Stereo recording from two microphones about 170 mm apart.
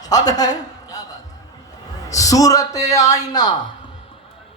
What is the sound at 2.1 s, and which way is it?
A man's voice, 20° left (ahead or behind).